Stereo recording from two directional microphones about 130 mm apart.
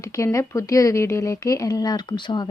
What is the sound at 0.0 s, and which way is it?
Speech, 25° left (ahead or behind).